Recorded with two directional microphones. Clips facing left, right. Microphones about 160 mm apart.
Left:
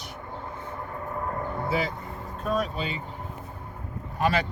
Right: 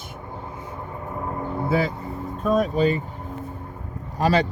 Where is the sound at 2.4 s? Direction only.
45° right (ahead or behind).